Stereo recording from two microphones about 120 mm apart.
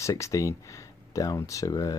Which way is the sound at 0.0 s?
25° left (ahead or behind).